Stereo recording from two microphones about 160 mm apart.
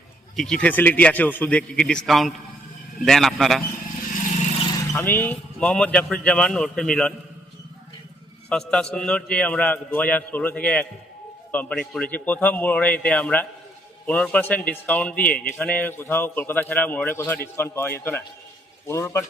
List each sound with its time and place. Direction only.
0.3 s a man's voice: 5° left (ahead or behind)
4.9 s a man's voice: 10° left (ahead or behind)
8.4 s a man's voice: 5° left (ahead or behind)